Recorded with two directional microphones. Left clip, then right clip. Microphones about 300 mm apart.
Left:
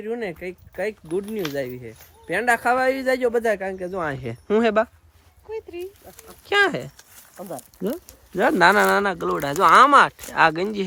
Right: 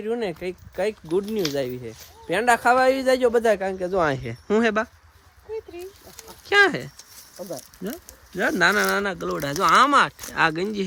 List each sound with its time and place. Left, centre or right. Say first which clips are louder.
0.0 s speech: right 2 dB; centre
3.9 s speech: right 7 dB; right
4.2 s speech: left 1 dB; centre
6.4 s speech: right 2 dB; centre
8.4 s speech: left 4 dB; centre